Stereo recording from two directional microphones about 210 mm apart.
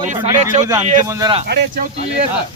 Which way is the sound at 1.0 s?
15° right (ahead or behind).